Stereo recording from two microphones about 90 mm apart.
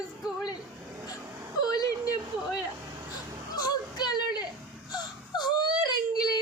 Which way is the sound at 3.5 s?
50° left (ahead or behind).